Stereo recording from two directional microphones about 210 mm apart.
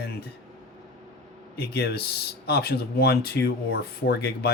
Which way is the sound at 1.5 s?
50° left (ahead or behind).